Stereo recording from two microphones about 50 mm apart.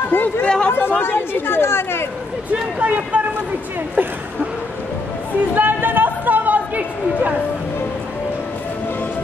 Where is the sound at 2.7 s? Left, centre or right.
Right.